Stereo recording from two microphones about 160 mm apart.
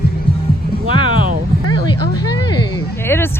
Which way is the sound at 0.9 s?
30° left (ahead or behind).